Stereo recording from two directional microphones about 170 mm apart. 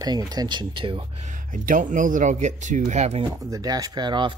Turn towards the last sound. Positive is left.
turn(degrees=-25)  # may be behind; listen again after turning